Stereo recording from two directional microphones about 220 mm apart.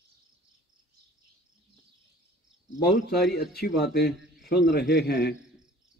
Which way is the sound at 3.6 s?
50° left (ahead or behind).